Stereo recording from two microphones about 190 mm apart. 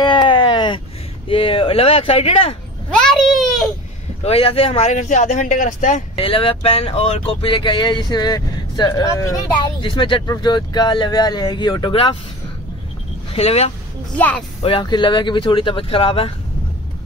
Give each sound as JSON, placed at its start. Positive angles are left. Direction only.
{"t": 0.0, "sound": "a sound", "side_deg": 25}
{"t": 1.3, "sound": "speech", "side_deg": 30}
{"t": 2.9, "sound": "a sound", "side_deg": 0}
{"t": 4.2, "sound": "speech", "side_deg": 30}
{"t": 13.3, "sound": "speech", "side_deg": 35}
{"t": 14.1, "sound": "speech", "side_deg": 10}
{"t": 14.6, "sound": "speech", "side_deg": 25}